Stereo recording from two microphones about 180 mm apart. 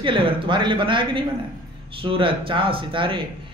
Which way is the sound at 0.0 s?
30° right (ahead or behind).